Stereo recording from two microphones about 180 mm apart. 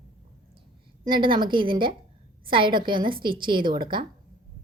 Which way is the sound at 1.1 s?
25° right (ahead or behind).